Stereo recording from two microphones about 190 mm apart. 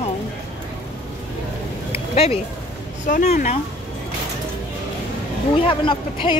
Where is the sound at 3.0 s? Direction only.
45° left (ahead or behind).